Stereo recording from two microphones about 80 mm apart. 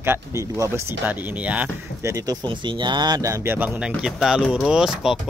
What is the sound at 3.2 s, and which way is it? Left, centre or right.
Speech, right.